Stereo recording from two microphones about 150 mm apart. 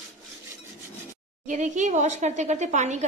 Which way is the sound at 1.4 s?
55° right (ahead or behind).